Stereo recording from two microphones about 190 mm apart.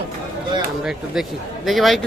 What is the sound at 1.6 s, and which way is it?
Speech, centre (ahead or behind).